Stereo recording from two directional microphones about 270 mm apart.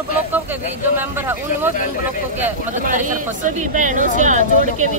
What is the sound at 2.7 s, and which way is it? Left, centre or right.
A woman's voice, right.